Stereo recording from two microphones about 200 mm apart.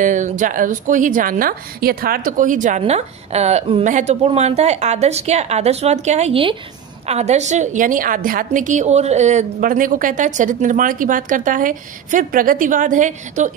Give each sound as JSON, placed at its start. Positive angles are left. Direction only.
{"t": 0.0, "sound": "a woman's voice", "side_deg": -40}